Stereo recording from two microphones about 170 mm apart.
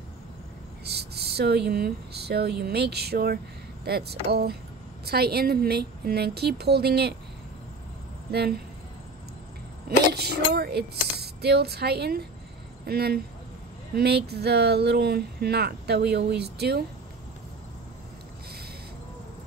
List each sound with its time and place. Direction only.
0.8 s speech: 75° right (ahead or behind)
8.3 s speech: 70° right (ahead or behind)
9.8 s speech: 70° right (ahead or behind)